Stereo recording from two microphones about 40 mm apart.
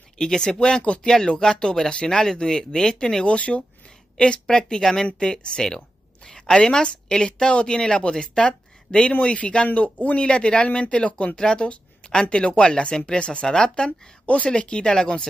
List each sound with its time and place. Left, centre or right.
0.2 s speech: centre
1.0 s speech: centre
3.3 s speech: left
4.2 s a woman's voice: left